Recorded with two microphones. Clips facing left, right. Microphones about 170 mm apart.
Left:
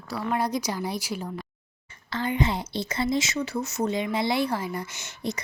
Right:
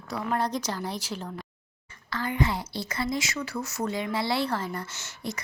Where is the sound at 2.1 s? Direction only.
20° left (ahead or behind).